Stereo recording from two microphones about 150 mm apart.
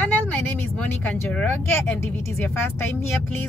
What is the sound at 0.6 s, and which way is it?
A woman's voice, 10° left (ahead or behind).